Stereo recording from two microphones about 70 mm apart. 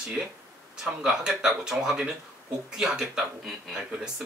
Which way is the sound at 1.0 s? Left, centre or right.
Centre.